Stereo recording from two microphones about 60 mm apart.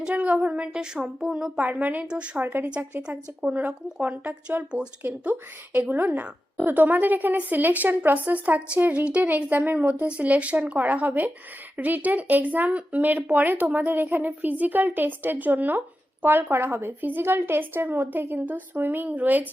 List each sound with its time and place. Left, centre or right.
0.0 s a sound: right
0.4 s speech: centre
1.6 s a woman's voice: right
2.0 s speech: centre
2.4 s a woman's voice: right
2.6 s a woman's voice: centre